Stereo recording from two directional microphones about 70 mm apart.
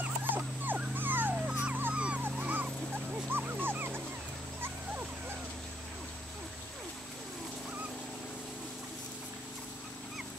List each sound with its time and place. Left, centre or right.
0.0 s dog: right
1.3 s dog: centre